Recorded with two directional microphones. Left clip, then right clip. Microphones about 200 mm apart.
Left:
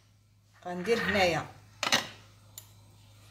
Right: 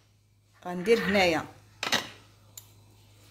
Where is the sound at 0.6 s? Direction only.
50° right (ahead or behind).